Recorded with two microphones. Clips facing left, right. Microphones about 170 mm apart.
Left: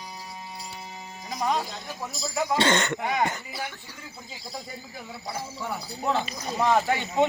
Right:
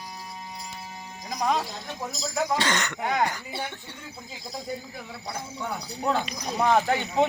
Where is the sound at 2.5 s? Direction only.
25° left (ahead or behind).